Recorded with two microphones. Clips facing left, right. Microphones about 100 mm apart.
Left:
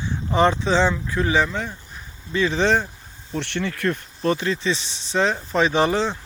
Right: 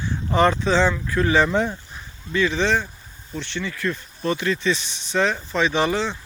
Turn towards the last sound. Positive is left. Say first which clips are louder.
# left 2 dB
turn(degrees=35)  # may be behind; listen again after turning